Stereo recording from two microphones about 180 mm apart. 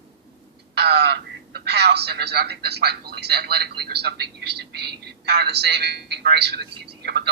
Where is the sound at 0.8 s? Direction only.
65° right (ahead or behind).